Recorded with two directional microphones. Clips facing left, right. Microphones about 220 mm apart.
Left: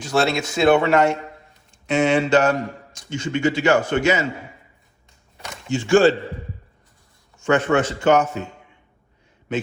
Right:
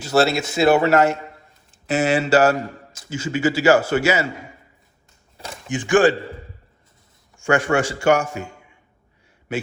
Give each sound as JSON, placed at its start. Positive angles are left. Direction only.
{"t": 0.0, "sound": "a man's voice", "side_deg": -5}
{"t": 5.6, "sound": "a man's voice", "side_deg": -15}
{"t": 7.3, "sound": "a man's voice", "side_deg": -10}